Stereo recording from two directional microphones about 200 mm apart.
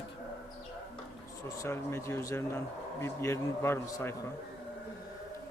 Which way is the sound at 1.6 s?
15° left (ahead or behind).